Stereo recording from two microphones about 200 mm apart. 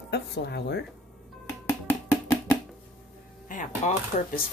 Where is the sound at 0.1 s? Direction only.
55° left (ahead or behind).